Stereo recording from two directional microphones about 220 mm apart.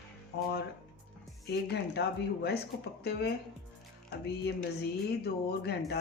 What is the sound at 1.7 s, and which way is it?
A man's voice, 50° left (ahead or behind).